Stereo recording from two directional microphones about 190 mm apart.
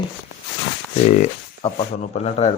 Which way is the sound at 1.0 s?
40° left (ahead or behind).